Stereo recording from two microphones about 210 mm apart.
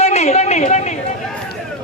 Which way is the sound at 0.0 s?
30° left (ahead or behind).